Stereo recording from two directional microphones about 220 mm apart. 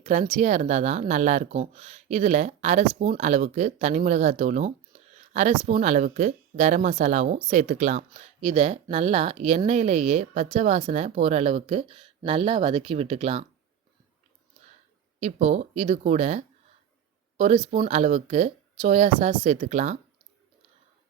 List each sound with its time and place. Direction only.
0.0 s speech: 30° right (ahead or behind)
15.2 s speech: 30° right (ahead or behind)